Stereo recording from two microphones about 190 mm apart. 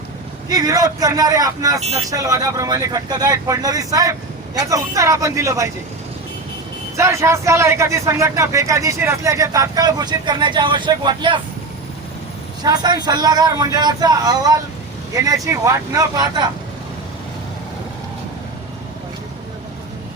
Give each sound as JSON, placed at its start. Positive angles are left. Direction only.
{"t": 0.4, "sound": "speech", "side_deg": -20}
{"t": 6.9, "sound": "speech", "side_deg": -15}
{"t": 12.6, "sound": "speech", "side_deg": -20}